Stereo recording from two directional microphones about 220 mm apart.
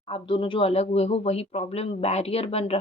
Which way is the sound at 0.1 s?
25° left (ahead or behind).